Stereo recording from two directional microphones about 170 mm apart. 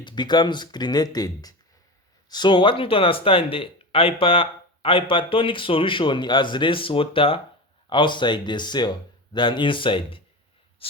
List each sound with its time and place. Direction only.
0.0 s speech: 25° left (ahead or behind)